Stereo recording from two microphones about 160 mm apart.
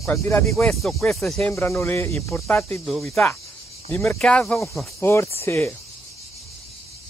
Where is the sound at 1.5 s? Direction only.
15° left (ahead or behind).